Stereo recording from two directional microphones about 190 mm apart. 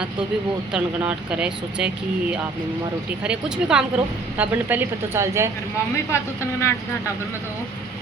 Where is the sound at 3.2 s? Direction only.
5° right (ahead or behind).